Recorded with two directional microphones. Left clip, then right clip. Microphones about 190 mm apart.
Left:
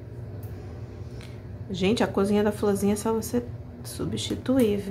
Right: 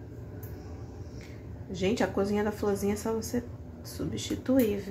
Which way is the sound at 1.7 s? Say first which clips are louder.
Left 4 dB; 15° left (ahead or behind).